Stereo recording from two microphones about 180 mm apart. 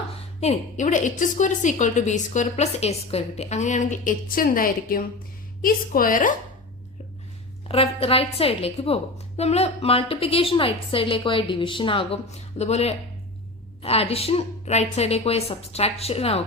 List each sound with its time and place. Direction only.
0.3 s a woman's voice: 40° left (ahead or behind)
7.7 s a woman's voice: 30° left (ahead or behind)